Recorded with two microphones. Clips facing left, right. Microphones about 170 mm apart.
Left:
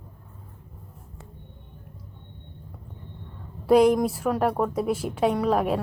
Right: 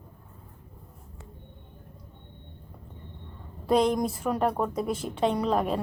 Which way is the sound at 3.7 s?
10° left (ahead or behind).